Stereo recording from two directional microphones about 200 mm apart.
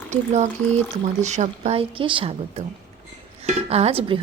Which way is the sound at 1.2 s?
35° right (ahead or behind).